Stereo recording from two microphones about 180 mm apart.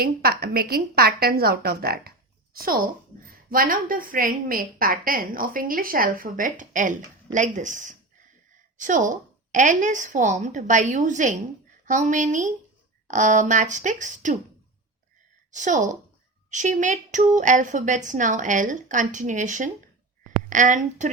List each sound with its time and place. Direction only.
0.0 s a woman's voice: 60° right (ahead or behind)
15.5 s a woman's voice: 45° right (ahead or behind)